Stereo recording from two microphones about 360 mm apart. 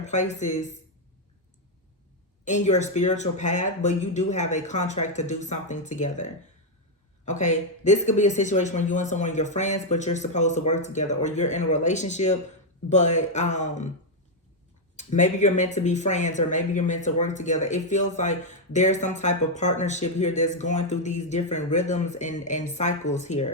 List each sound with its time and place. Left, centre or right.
0.0 s speech: centre
2.4 s speech: centre
14.9 s speech: centre